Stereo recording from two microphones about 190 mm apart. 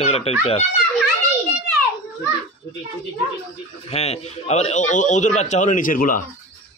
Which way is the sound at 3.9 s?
35° left (ahead or behind).